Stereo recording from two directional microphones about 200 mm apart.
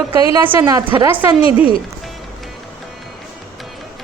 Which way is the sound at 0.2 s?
15° right (ahead or behind).